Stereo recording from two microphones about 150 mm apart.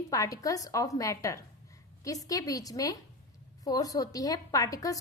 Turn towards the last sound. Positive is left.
turn(degrees=20)  # may be behind; listen again after turning